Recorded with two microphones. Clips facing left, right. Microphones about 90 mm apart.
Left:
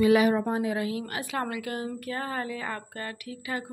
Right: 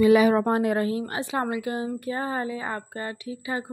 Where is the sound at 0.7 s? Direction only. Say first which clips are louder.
Right 5 dB; 35° right (ahead or behind).